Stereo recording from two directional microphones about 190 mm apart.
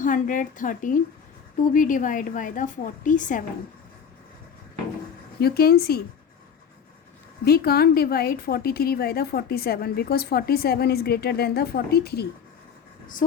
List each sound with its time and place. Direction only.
0.0 s a woman's voice: 45° left (ahead or behind)
5.4 s speech: 55° left (ahead or behind)
7.4 s a woman's voice: 55° left (ahead or behind)